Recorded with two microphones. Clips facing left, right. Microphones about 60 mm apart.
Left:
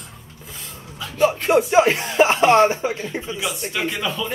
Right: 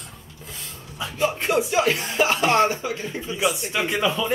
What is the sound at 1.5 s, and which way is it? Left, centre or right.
Speech, left.